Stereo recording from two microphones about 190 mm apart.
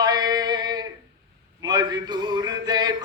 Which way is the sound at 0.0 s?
20° right (ahead or behind).